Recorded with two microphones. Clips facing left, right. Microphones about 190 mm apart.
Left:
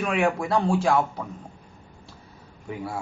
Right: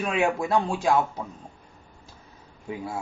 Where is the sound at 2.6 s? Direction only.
20° right (ahead or behind).